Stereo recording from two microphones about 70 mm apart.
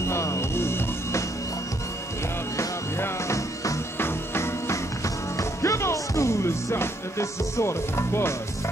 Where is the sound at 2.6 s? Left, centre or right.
Left.